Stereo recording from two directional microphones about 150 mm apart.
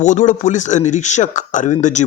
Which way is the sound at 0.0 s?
55° left (ahead or behind).